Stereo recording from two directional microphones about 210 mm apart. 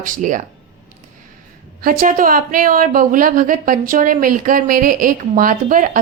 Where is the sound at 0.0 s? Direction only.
40° right (ahead or behind).